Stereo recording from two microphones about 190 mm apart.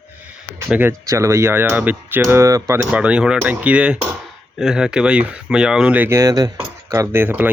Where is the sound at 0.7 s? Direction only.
10° right (ahead or behind).